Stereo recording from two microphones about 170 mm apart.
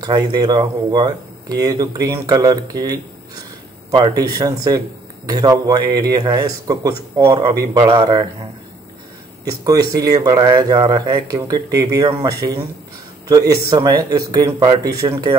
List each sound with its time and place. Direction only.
0.0 s speech: 20° right (ahead or behind)
13.7 s speech: 25° right (ahead or behind)